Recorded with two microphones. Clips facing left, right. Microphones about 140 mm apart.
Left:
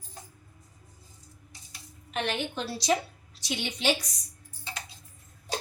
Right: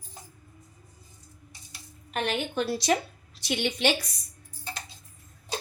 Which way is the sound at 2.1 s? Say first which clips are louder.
Right 2 dB; 50° right (ahead or behind).